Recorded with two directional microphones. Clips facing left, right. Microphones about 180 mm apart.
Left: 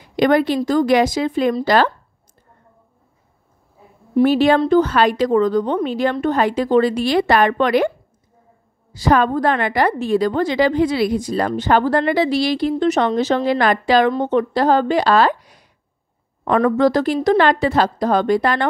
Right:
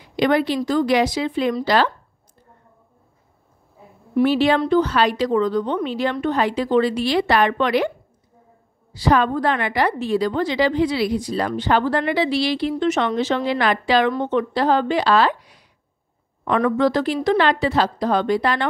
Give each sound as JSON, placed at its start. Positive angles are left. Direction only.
{"t": 0.0, "sound": "a woman's voice", "side_deg": 45}
{"t": 4.2, "sound": "a woman's voice", "side_deg": 45}
{"t": 8.9, "sound": "a woman's voice", "side_deg": 45}